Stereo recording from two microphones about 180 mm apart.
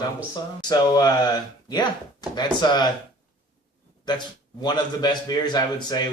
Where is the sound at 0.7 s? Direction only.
20° left (ahead or behind).